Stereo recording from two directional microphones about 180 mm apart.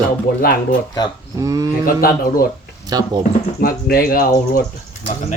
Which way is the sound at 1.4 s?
20° right (ahead or behind).